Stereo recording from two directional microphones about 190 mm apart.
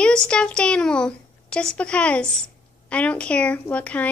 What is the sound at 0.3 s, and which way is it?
A woman's voice, 5° left (ahead or behind).